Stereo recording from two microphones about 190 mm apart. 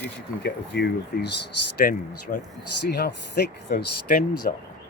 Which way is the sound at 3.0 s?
60° left (ahead or behind).